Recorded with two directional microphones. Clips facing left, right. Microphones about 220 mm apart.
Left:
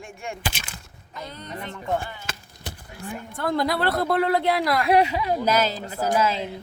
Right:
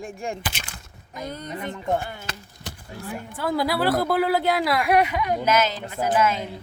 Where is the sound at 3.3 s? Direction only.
5° right (ahead or behind).